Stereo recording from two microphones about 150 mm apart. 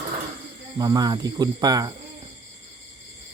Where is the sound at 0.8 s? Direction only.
25° right (ahead or behind).